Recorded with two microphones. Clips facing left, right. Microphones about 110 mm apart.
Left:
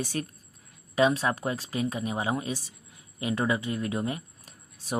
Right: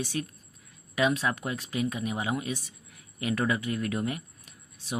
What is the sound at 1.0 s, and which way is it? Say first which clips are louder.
Speech: left 3 dB; 35° left (ahead or behind).